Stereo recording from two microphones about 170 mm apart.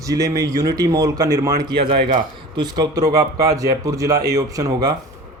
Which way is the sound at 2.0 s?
50° right (ahead or behind).